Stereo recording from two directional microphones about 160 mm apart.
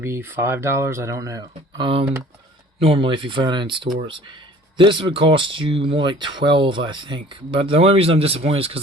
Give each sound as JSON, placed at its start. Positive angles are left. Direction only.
{"t": 0.0, "sound": "speech", "side_deg": -15}